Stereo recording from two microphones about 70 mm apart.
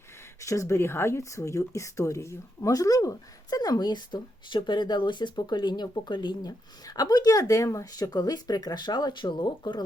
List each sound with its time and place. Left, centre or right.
0.3 s speech: left